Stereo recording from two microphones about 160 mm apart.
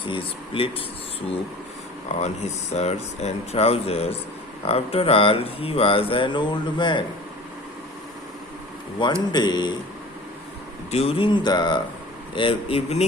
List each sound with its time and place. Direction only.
0.1 s speech: 35° left (ahead or behind)
2.7 s speech: 40° left (ahead or behind)
9.0 s speech: 30° left (ahead or behind)
10.9 s speech: 35° left (ahead or behind)